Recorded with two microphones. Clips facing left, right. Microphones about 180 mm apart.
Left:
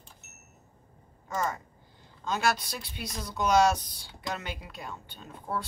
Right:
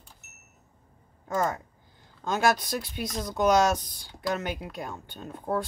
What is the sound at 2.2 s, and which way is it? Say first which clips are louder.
Speech: right 4 dB; 45° right (ahead or behind).